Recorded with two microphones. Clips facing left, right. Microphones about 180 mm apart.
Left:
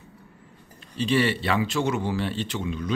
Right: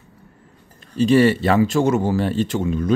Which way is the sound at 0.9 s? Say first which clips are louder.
Right 9 dB; 45° right (ahead or behind).